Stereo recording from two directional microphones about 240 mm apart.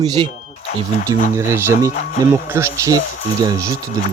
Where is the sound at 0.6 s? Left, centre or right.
Left.